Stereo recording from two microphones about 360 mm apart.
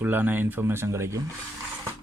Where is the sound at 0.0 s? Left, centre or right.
Centre.